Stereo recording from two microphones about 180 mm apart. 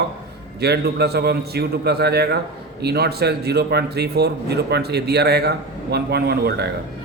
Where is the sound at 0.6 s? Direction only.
65° right (ahead or behind).